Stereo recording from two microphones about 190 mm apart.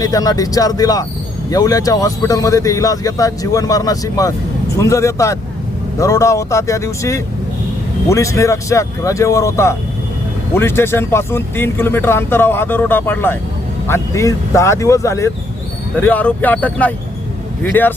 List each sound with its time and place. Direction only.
0.0 s speech: 20° left (ahead or behind)